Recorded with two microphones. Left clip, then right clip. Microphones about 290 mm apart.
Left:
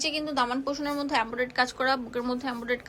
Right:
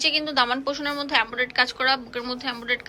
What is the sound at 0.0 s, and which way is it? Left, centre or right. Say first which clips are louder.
A woman's voice: right 6 dB; centre.